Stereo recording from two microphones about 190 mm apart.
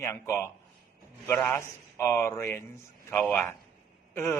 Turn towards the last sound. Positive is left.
turn(degrees=10)  # may be behind; listen again after turning